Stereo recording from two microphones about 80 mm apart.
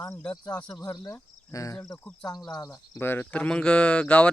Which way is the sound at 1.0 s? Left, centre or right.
Left.